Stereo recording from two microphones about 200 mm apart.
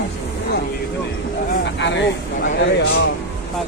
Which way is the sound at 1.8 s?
60° left (ahead or behind).